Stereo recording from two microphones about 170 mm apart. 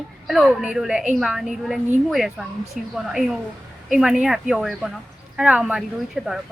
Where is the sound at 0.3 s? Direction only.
5° right (ahead or behind).